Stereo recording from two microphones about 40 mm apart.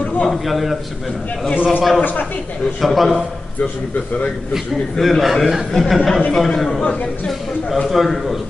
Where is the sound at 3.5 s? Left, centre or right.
Left.